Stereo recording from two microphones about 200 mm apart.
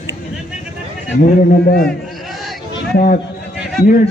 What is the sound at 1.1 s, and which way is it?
Speech, 45° left (ahead or behind).